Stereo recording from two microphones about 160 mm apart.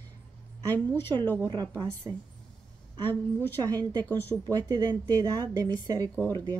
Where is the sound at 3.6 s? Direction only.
25° right (ahead or behind).